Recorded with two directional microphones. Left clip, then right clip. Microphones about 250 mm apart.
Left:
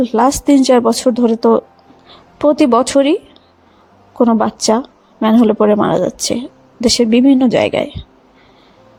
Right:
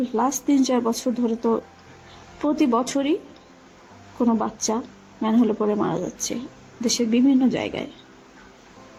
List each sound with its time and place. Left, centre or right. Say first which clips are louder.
0.0 s speech: left 11 dB; left
4.2 s speech: left 10 dB; left